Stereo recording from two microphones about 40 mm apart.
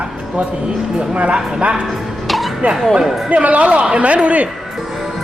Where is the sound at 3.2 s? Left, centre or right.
Right.